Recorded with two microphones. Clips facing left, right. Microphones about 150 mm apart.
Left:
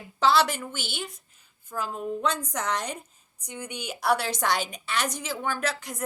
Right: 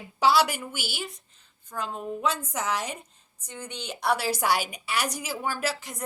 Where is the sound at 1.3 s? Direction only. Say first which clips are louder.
Left 2 dB; 10° left (ahead or behind).